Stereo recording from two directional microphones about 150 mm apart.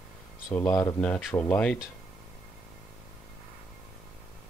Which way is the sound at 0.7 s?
15° left (ahead or behind).